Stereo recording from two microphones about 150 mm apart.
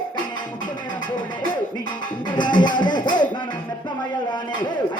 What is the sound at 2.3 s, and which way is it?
Speech, 30° left (ahead or behind).